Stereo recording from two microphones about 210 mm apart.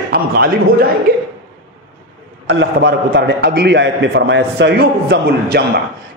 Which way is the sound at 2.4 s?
50° right (ahead or behind).